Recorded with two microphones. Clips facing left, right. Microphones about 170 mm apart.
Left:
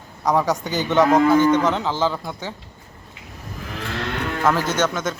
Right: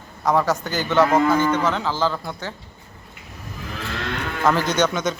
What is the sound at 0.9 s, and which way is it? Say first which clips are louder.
A man's voice: left 2 dB; 15° left (ahead or behind).